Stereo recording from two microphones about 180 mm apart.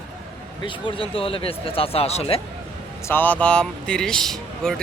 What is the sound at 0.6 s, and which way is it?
Speech, 30° left (ahead or behind).